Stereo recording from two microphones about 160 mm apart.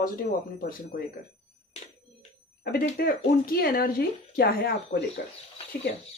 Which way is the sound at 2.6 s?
70° left (ahead or behind).